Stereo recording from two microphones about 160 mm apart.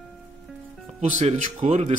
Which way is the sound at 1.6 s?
45° right (ahead or behind).